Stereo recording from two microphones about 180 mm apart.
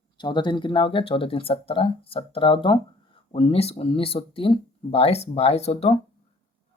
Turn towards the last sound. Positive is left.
turn(degrees=35)  # may be behind; listen again after turning